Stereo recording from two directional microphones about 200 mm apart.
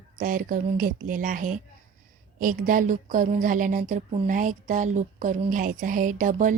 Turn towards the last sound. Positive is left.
turn(degrees=-40)  # may be behind; listen again after turning